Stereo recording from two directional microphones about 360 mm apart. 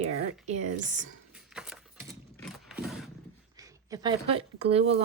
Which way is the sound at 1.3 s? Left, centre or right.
Centre.